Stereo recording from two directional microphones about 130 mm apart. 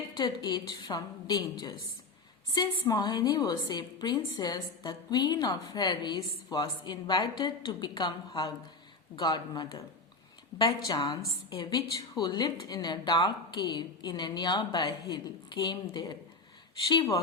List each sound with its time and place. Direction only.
0.2 s a woman's voice: 30° left (ahead or behind)
11.0 s a woman's voice: 30° left (ahead or behind)